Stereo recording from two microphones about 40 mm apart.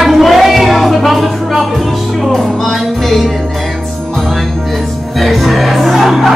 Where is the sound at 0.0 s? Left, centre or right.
Centre.